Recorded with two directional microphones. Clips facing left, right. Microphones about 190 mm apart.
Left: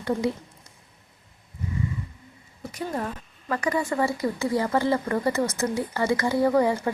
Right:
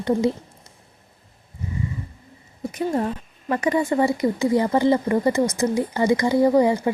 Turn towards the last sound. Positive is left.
turn(degrees=-20)  # may be behind; listen again after turning